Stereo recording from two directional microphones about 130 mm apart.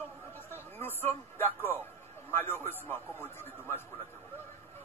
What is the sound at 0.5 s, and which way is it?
Music, 15° left (ahead or behind).